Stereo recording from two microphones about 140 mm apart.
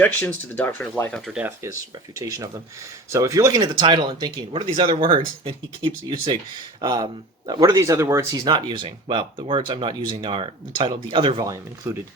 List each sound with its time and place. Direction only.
0.0 s speech: 15° left (ahead or behind)
1.1 s speech: 5° right (ahead or behind)
2.1 s speech: 25° right (ahead or behind)
4.6 s speech: 40° right (ahead or behind); by 8.4 s 20° right (ahead or behind)
8.4 s speech: 30° right (ahead or behind)
11.4 s speech: 20° right (ahead or behind)